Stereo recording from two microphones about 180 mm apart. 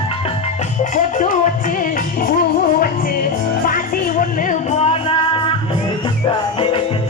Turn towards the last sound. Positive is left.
turn(degrees=30)  # may be behind; listen again after turning